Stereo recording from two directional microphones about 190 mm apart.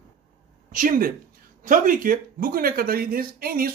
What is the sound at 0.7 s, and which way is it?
Speech, 45° right (ahead or behind).